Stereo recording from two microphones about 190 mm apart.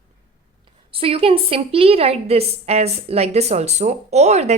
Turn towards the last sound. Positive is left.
turn(degrees=-35)  # may be behind; listen again after turning